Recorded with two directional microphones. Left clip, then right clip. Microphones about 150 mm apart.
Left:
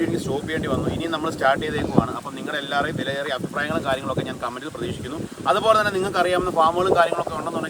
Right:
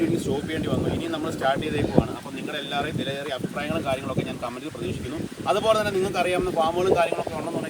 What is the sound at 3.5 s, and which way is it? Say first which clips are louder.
Speech: left 3 dB; 20° left (ahead or behind).